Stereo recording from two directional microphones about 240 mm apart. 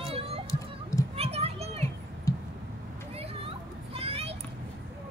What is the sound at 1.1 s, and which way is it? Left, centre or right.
Children playing, right.